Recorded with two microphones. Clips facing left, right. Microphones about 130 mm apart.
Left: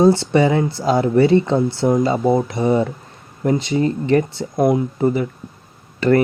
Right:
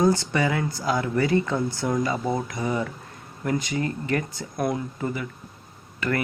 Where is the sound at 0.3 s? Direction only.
25° left (ahead or behind).